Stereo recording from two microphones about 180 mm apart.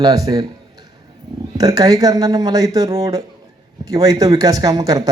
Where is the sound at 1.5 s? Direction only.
20° right (ahead or behind).